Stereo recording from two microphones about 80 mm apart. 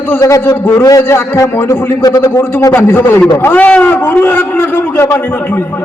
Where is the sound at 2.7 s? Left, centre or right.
Left.